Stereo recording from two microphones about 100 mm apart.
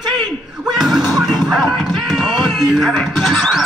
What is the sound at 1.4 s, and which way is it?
Music, centre (ahead or behind).